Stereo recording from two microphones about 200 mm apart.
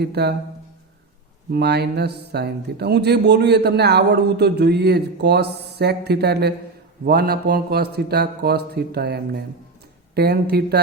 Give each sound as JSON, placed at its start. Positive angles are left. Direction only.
{"t": 0.0, "sound": "speech", "side_deg": -55}
{"t": 1.5, "sound": "speech", "side_deg": -55}